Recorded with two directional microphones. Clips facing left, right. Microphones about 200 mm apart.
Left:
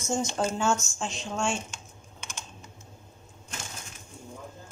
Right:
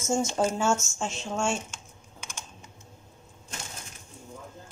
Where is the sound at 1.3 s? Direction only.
5° right (ahead or behind).